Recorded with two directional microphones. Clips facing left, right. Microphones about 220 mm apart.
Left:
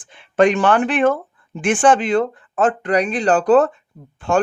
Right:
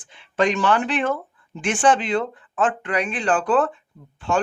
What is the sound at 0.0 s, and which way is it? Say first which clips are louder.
Speech: left 6 dB; 55° left (ahead or behind).